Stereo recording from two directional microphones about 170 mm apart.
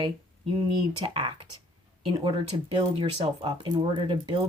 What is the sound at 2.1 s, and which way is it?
Speech, 30° right (ahead or behind).